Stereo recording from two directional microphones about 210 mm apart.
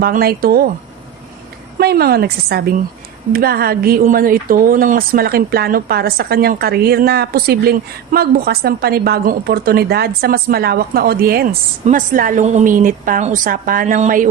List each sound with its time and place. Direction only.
0.0 s speech: 45° right (ahead or behind)
1.8 s a woman's voice: 50° right (ahead or behind)